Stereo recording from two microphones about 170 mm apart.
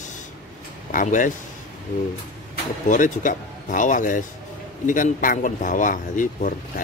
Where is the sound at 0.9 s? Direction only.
50° left (ahead or behind).